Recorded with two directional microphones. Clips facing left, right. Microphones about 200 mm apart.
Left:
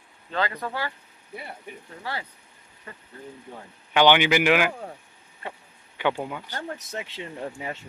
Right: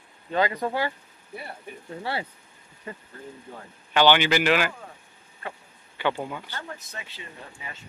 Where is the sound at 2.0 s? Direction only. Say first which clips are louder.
Right 4 dB; 25° right (ahead or behind).